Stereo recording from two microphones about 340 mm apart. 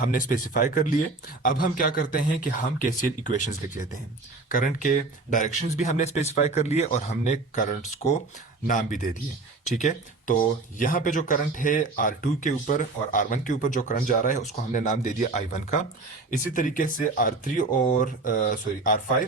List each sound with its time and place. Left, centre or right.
0.0 s speech: left